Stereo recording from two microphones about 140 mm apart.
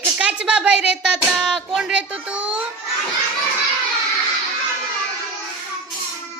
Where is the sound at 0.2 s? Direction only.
10° right (ahead or behind).